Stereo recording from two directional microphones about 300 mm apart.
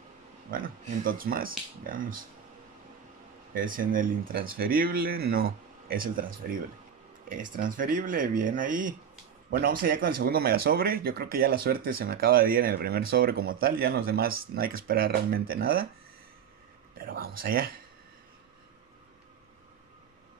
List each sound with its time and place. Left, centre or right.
0.5 s speech: right
3.5 s speech: right
16.9 s a sound: right
17.4 s speech: right